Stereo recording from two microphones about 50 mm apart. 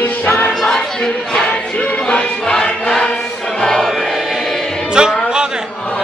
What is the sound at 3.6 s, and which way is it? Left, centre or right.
Choir, centre.